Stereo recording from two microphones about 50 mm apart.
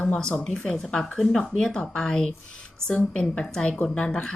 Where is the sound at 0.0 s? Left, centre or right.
Centre.